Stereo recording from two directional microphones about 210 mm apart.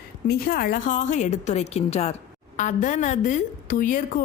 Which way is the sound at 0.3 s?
45° left (ahead or behind).